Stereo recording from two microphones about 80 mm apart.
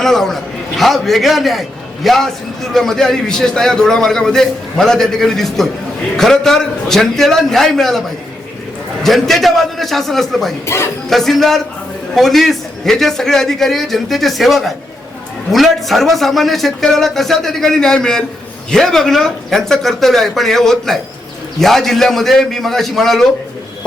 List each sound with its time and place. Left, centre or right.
0.0 s a man's voice: centre
9.0 s a man's voice: centre
10.7 s speech: left
11.1 s a man's voice: centre